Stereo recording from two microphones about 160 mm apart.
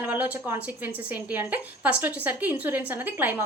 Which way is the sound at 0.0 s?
10° right (ahead or behind).